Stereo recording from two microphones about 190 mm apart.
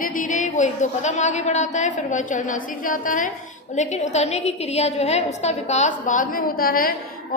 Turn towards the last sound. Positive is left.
turn(degrees=50)  # may be behind; listen again after turning